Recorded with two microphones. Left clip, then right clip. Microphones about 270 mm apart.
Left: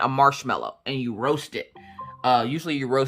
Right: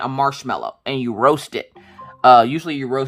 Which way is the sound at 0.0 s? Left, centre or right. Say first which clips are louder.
Left 1 dB; centre.